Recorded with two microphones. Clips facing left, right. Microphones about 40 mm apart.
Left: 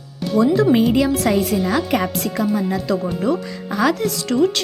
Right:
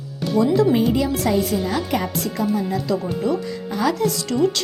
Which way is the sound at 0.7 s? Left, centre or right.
Left.